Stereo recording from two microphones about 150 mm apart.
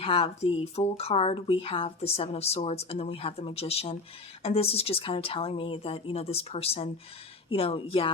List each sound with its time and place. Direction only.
0.0 s speech: 40° left (ahead or behind)